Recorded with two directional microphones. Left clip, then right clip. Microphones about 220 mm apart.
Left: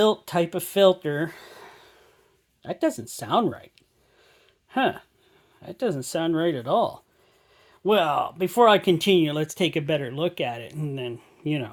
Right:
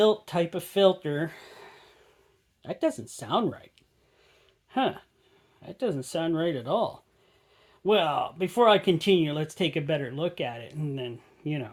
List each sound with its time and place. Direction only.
0.0 s speech: 35° left (ahead or behind)
4.7 s speech: 35° left (ahead or behind)